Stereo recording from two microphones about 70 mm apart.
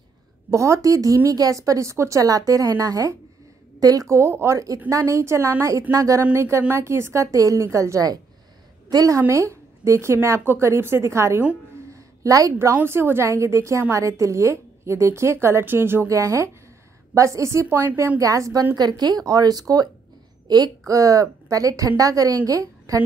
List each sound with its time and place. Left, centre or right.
0.5 s a woman's voice: right
4.1 s a woman's voice: right
6.3 s a woman's voice: right
9.3 s a woman's voice: right
11.9 s a sound: right
12.7 s a woman's voice: right
16.1 s a woman's voice: right
18.2 s a woman's voice: right
18.8 s speech: right
20.4 s a woman's voice: right
20.8 s a woman's voice: right